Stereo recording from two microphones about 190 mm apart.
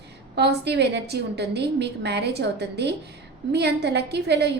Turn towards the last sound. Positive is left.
turn(degrees=-60)  # may be behind; listen again after turning